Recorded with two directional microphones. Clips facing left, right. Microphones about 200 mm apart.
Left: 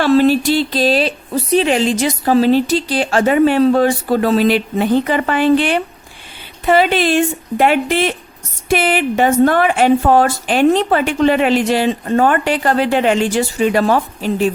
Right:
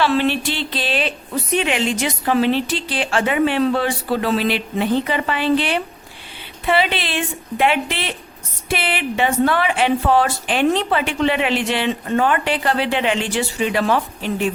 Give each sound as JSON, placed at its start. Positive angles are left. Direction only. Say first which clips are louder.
{"t": 0.0, "sound": "a woman's voice", "louder": "left 7 dB", "side_deg": 40}